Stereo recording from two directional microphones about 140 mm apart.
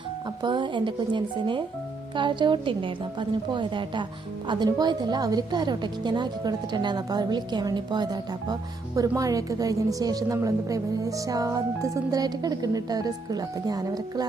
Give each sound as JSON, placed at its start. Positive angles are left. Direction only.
{"t": 0.4, "sound": "a woman's voice", "side_deg": -35}